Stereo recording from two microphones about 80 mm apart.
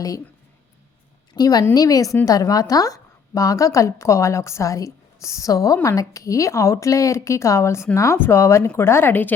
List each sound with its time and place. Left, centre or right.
1.4 s a woman's voice: left